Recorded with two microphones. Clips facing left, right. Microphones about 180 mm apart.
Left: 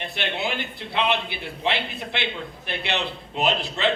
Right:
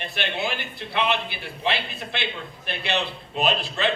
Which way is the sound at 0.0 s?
20° left (ahead or behind).